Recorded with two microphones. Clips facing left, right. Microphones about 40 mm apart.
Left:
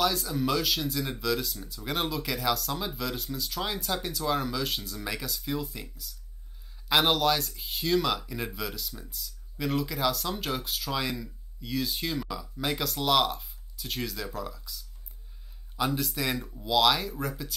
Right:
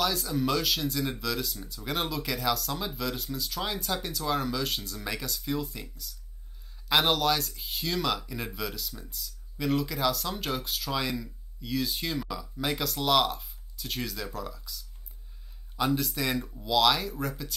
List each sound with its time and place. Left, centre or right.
0.0 s speech: centre